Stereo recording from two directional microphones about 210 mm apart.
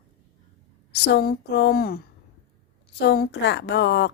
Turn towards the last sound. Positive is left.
turn(degrees=55)  # may be behind; listen again after turning